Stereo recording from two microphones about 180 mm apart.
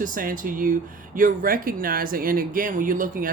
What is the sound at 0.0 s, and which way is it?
Speech, 50° right (ahead or behind).